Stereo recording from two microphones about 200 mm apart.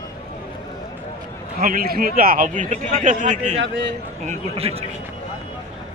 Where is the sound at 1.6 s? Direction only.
45° right (ahead or behind); by 4.8 s 30° right (ahead or behind).